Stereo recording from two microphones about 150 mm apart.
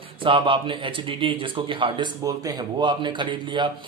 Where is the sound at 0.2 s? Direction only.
35° right (ahead or behind).